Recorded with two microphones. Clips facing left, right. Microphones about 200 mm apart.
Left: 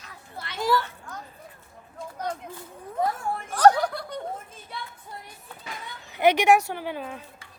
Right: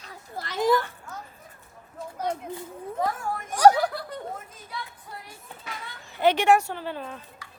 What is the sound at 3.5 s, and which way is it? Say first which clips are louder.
Speech: right 1 dB; 10° right (ahead or behind).